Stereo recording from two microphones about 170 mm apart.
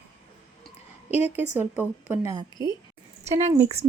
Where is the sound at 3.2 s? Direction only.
40° right (ahead or behind).